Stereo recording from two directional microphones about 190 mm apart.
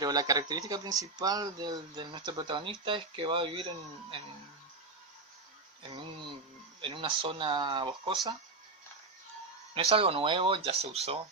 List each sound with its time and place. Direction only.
0.0 s speech: 20° right (ahead or behind)
6.8 s speech: 25° right (ahead or behind)
9.7 s speech: 30° right (ahead or behind)